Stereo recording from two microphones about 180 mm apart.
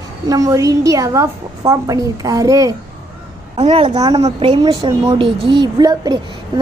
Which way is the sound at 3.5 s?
30° right (ahead or behind).